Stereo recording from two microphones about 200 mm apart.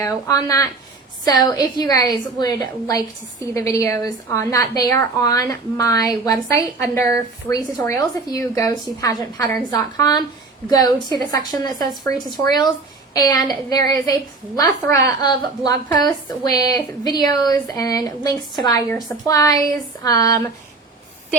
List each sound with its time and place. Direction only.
0.0 s a woman's voice: 15° left (ahead or behind)